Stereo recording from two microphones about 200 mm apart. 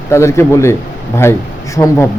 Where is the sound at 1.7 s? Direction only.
15° left (ahead or behind).